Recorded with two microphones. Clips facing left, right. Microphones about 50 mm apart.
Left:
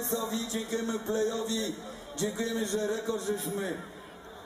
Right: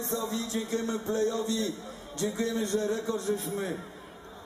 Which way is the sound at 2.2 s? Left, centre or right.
Right.